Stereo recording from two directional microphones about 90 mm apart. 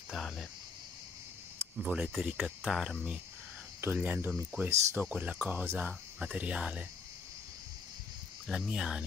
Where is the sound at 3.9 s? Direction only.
20° right (ahead or behind).